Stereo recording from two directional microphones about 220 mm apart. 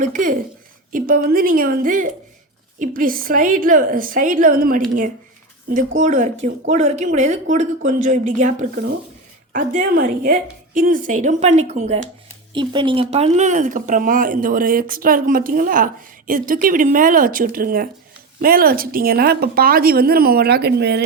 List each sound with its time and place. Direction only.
0.0 s a woman's voice: 35° right (ahead or behind)